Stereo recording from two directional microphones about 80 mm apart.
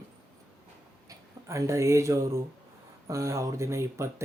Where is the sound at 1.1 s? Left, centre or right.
Right.